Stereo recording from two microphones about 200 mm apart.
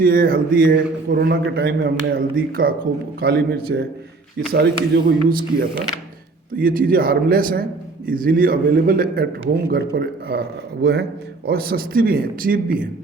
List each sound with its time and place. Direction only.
0.0 s a man's voice: 45° right (ahead or behind)